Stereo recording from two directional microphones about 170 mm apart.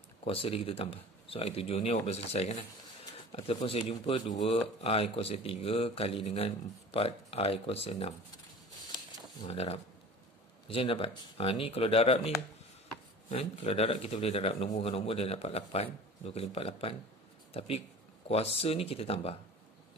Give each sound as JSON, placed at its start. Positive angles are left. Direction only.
{"t": 0.2, "sound": "speech", "side_deg": 35}
{"t": 9.5, "sound": "speech", "side_deg": 35}
{"t": 13.3, "sound": "speech", "side_deg": 35}